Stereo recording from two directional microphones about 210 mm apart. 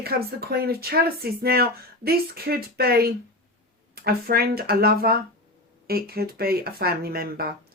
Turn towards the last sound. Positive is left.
turn(degrees=-45)  # may be behind; listen again after turning